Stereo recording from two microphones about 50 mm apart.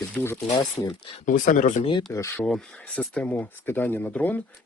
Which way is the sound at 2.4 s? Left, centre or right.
Centre.